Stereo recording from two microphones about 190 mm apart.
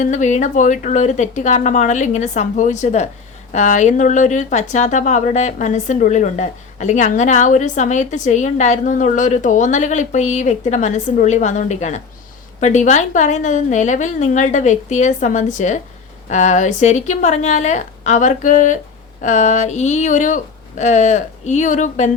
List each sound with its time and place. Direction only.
0.0 s a woman's voice: 40° left (ahead or behind)